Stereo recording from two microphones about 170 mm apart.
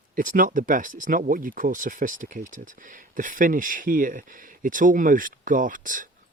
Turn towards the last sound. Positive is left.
turn(degrees=-50)  # may be behind; listen again after turning